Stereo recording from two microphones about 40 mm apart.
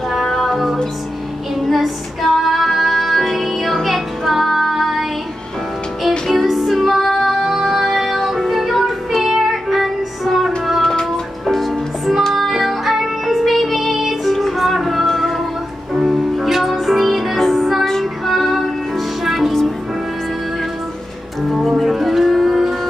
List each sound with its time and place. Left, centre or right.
0.1 s music: centre
6.4 s music: centre
10.8 s music: centre
11.1 s music: centre
15.9 s music: centre
17.8 s music: centre
21.4 s music: centre